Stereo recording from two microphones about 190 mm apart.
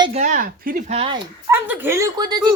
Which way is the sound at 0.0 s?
35° right (ahead or behind).